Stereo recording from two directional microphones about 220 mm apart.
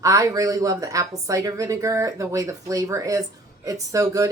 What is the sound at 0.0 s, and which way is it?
A woman's voice, 15° right (ahead or behind).